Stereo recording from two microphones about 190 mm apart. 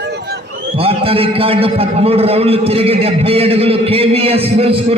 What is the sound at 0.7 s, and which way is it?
A man's voice, 30° right (ahead or behind).